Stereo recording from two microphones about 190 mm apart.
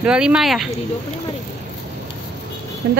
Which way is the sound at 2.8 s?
60° right (ahead or behind).